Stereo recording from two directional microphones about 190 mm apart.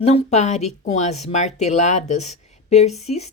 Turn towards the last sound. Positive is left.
turn(degrees=35)  # may be behind; listen again after turning